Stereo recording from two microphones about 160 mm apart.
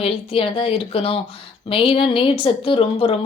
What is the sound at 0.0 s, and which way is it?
Speech, 35° left (ahead or behind).